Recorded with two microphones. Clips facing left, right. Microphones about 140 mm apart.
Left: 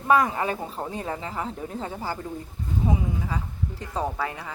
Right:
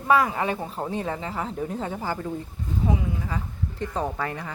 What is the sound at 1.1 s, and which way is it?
Speech, 30° right (ahead or behind).